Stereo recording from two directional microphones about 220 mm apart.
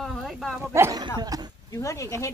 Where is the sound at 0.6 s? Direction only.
10° right (ahead or behind).